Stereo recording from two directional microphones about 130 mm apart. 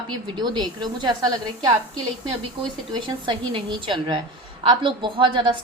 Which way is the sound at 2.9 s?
35° right (ahead or behind).